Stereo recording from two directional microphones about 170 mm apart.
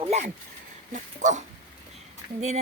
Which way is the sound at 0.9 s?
45° right (ahead or behind).